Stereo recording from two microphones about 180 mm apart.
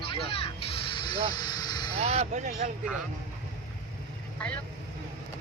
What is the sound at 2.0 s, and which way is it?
Speech, 35° right (ahead or behind).